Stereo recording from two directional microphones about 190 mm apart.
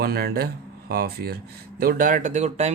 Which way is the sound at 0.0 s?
55° right (ahead or behind).